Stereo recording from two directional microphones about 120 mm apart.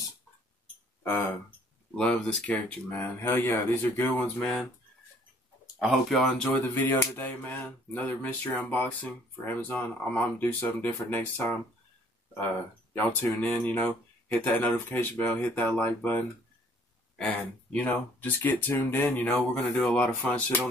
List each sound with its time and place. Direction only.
2.0 s speech: 10° left (ahead or behind)
5.8 s speech: centre (ahead or behind)
6.7 s speech: 20° left (ahead or behind)
12.9 s speech: 15° left (ahead or behind)
17.8 s speech: 15° left (ahead or behind)